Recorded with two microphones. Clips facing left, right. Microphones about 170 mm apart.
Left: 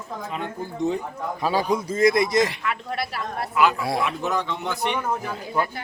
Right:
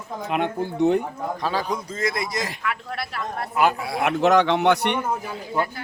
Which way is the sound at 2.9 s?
5° left (ahead or behind).